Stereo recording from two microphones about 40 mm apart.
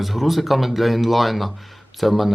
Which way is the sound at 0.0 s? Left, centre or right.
Centre.